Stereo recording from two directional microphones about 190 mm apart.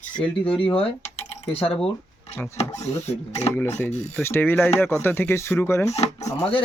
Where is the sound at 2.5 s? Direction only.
35° left (ahead or behind).